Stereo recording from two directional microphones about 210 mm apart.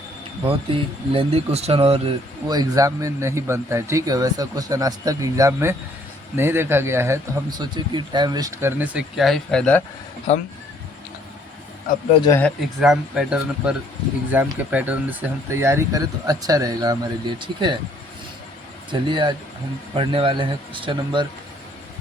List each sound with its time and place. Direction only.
0.4 s speech: 25° right (ahead or behind); by 9.8 s 5° left (ahead or behind)
10.3 s speech: 30° left (ahead or behind)
12.1 s speech: 20° left (ahead or behind)
12.4 s speech: centre (ahead or behind); by 17.7 s 20° right (ahead or behind)
18.9 s speech: 20° right (ahead or behind)